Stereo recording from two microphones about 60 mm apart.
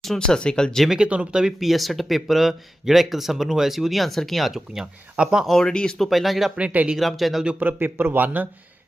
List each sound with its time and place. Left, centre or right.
0.0 s speech: centre
0.9 s speech: centre
1.4 s speech: centre
5.5 s speech: centre
6.0 s speech: centre
6.6 s speech: right
6.9 s speech: centre
7.6 s a man's voice: right